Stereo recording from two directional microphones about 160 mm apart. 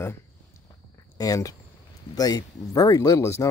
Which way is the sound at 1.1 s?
20° left (ahead or behind).